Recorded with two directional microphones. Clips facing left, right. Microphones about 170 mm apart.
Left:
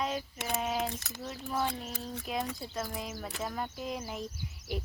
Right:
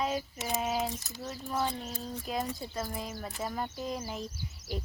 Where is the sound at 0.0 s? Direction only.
Centre (ahead or behind).